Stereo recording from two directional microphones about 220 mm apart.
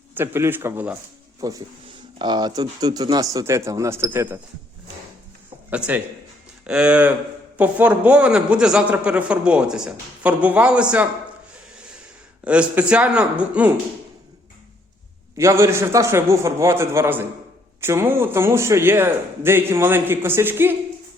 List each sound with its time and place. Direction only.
0.1 s speech: 10° right (ahead or behind)
5.7 s a man's voice: 5° right (ahead or behind)
12.5 s a man's voice: 5° right (ahead or behind)
15.4 s speech: 10° right (ahead or behind)